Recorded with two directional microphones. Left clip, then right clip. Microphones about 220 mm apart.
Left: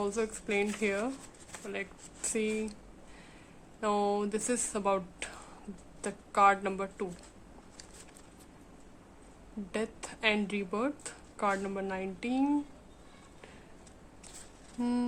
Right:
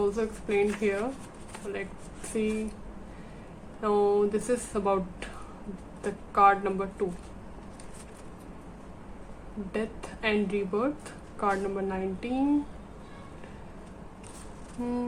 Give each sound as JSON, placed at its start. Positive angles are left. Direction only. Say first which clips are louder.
{"t": 0.0, "sound": "a woman's voice", "louder": "right 5 dB", "side_deg": 45}
{"t": 3.8, "sound": "a woman's voice", "louder": "right 6 dB", "side_deg": 50}
{"t": 9.7, "sound": "a woman's voice", "louder": "right 2 dB", "side_deg": 45}
{"t": 14.8, "sound": "a woman's voice", "louder": "right 1 dB", "side_deg": 55}